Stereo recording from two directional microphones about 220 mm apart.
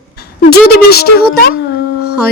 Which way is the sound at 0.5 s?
45° left (ahead or behind).